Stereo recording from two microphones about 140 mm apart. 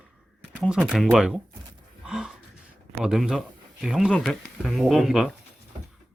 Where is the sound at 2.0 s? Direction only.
5° right (ahead or behind).